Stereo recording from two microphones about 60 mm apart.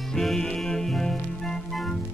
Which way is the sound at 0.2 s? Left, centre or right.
Centre.